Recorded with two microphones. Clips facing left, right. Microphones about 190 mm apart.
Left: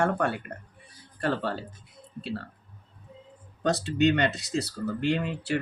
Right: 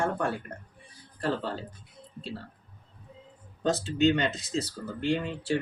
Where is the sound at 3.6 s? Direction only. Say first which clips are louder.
Left 1 dB; 65° left (ahead or behind).